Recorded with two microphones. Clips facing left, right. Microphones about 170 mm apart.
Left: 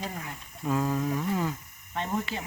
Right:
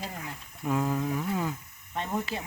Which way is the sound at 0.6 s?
15° right (ahead or behind).